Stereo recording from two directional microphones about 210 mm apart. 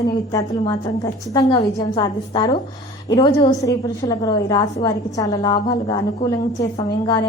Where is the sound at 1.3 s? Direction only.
20° left (ahead or behind).